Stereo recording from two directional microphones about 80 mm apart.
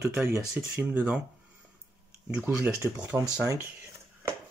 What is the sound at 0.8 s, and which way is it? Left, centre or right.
Speech, right.